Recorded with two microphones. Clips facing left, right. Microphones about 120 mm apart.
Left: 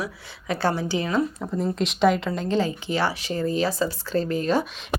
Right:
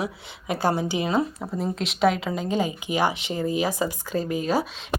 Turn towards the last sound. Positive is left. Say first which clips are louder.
# left 1 dB
turn(degrees=-5)  # may be behind; listen again after turning